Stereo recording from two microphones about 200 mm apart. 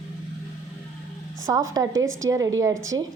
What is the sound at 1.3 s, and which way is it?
A woman's voice, 15° right (ahead or behind).